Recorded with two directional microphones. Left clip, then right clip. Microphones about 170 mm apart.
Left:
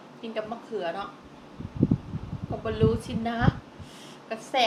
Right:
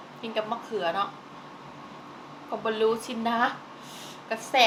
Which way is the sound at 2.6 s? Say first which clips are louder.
Right 1 dB; 5° left (ahead or behind).